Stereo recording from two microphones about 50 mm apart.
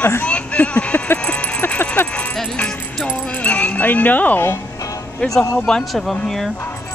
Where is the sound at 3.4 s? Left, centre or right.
Left.